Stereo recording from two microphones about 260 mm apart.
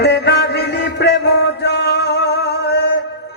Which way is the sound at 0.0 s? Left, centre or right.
Left.